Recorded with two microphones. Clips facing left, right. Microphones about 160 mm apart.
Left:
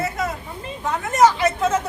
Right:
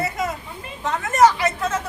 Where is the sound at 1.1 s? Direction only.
25° left (ahead or behind).